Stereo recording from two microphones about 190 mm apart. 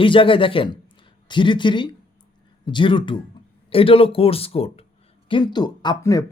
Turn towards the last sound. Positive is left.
turn(degrees=20)  # may be behind; listen again after turning